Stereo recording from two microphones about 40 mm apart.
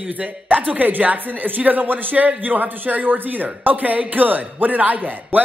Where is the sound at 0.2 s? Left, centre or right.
Right.